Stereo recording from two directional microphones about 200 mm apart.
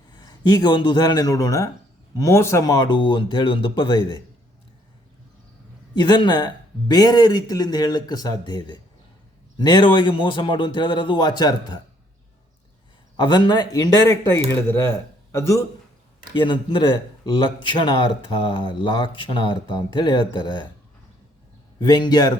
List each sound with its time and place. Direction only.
0.1 s a man's voice: 20° left (ahead or behind)
5.9 s speech: 20° left (ahead or behind)
13.1 s speech: 20° left (ahead or behind)
16.3 s speech: 25° left (ahead or behind)
21.8 s speech: 20° left (ahead or behind)